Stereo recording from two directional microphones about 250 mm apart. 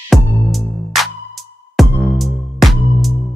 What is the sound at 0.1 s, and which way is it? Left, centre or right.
Music, centre.